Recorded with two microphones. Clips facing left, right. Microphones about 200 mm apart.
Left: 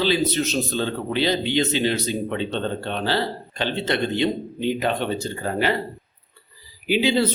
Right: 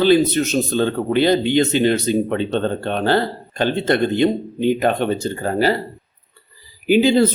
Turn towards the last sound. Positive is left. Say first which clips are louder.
# right 6 dB
turn(degrees=-45)  # may be behind; listen again after turning